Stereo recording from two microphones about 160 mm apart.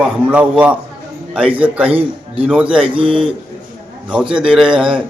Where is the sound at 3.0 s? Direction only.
35° right (ahead or behind).